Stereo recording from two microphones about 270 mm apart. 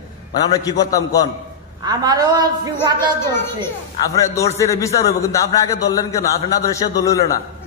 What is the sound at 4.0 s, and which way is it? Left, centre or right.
A man's voice, centre.